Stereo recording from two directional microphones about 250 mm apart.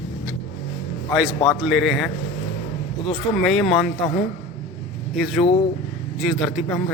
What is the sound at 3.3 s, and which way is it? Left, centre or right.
Speech, centre.